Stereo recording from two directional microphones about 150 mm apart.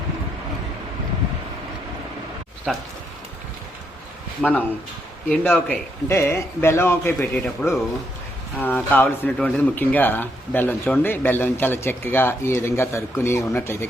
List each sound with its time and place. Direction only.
2.7 s speech: centre (ahead or behind)
4.4 s speech: 10° left (ahead or behind)